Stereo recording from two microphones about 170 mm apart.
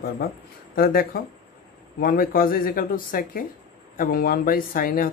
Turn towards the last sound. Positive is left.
turn(degrees=55)  # may be behind; listen again after turning